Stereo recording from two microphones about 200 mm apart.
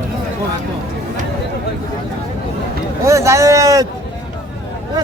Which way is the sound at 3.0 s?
15° right (ahead or behind).